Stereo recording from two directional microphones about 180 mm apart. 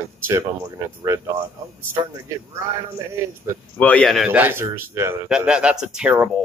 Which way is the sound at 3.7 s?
10° left (ahead or behind).